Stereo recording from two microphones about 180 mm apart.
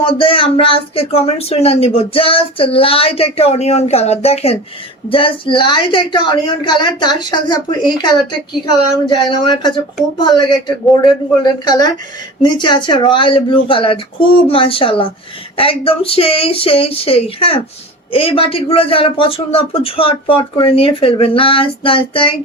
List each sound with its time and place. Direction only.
0.0 s a woman's voice: 30° left (ahead or behind)